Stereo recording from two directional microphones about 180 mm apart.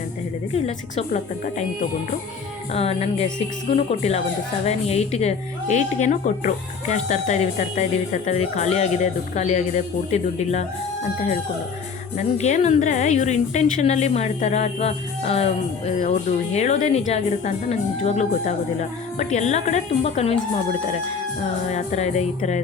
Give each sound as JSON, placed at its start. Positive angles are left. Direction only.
{"t": 0.5, "sound": "speech", "side_deg": 40}
{"t": 2.7, "sound": "speech", "side_deg": 35}
{"t": 12.1, "sound": "speech", "side_deg": 40}
{"t": 21.7, "sound": "speech", "side_deg": 40}